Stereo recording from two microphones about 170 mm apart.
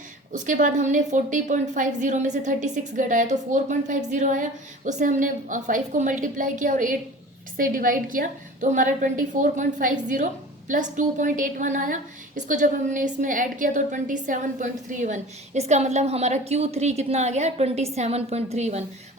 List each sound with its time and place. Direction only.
0.3 s a woman's voice: 50° right (ahead or behind)